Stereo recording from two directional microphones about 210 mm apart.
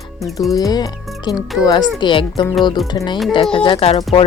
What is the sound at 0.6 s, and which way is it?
Speech, 20° left (ahead or behind).